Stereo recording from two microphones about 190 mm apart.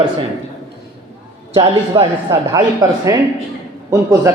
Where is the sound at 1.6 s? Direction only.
20° right (ahead or behind).